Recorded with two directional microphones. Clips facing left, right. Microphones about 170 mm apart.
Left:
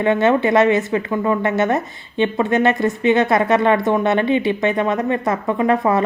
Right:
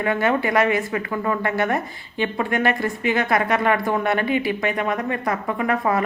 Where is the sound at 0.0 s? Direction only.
25° left (ahead or behind).